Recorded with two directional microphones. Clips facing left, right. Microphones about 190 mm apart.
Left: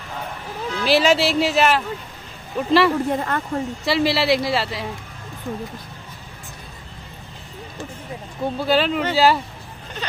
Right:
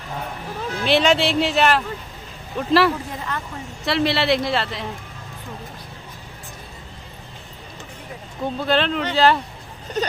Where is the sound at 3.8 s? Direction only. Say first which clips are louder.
Even; centre (ahead or behind).